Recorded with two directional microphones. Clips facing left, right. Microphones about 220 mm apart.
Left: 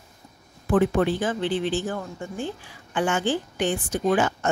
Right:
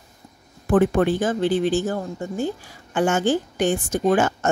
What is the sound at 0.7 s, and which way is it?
Speech, 50° right (ahead or behind).